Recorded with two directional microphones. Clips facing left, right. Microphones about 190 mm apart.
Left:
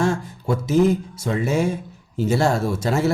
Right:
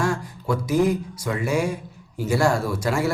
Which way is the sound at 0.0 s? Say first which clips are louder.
Left 3 dB; 25° left (ahead or behind).